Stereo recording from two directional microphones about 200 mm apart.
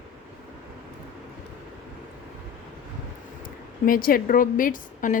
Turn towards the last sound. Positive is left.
turn(degrees=40)  # may be behind; listen again after turning